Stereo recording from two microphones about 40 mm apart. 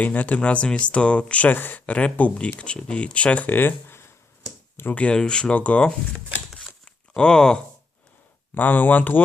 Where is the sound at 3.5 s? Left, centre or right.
Left.